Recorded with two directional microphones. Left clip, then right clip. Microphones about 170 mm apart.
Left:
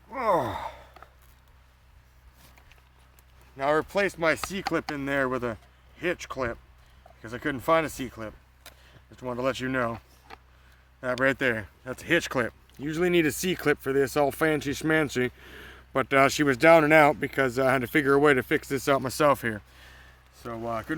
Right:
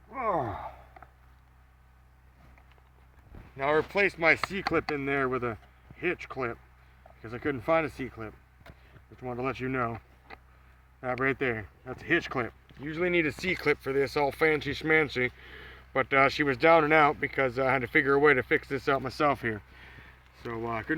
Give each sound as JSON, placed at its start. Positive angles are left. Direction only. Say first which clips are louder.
{"t": 0.1, "sound": "gasp", "louder": "left 5 dB", "side_deg": 55}
{"t": 3.6, "sound": "speech", "louder": "left 1 dB", "side_deg": 30}
{"t": 11.0, "sound": "speech", "louder": "left 4 dB", "side_deg": 40}
{"t": 20.4, "sound": "speech", "louder": "left 1 dB", "side_deg": 30}